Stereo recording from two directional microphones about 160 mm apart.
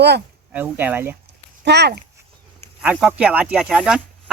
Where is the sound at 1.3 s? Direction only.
90° right.